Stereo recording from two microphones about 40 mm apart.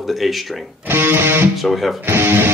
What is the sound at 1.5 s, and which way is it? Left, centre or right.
Speech, centre.